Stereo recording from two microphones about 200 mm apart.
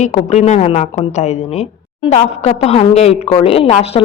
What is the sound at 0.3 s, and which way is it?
A woman's voice, 35° left (ahead or behind).